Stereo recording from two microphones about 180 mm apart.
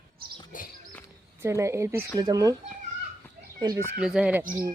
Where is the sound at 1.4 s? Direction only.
15° right (ahead or behind).